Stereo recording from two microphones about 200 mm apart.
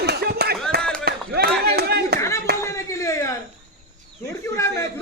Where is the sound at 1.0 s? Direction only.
50° right (ahead or behind).